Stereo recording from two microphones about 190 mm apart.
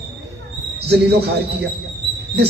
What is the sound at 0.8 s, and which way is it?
Speech, 60° right (ahead or behind).